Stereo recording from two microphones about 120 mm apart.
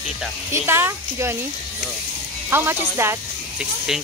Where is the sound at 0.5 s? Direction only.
20° right (ahead or behind).